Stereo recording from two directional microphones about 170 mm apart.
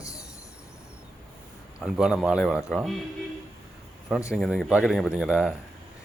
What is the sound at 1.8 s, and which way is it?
Speech, centre (ahead or behind).